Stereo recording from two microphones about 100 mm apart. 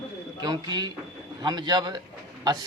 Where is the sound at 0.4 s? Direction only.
45° right (ahead or behind).